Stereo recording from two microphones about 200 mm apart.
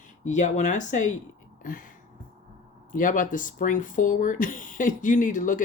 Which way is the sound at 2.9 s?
40° left (ahead or behind).